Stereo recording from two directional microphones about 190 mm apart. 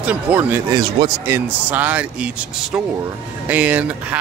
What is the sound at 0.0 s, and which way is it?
Speech, 10° right (ahead or behind).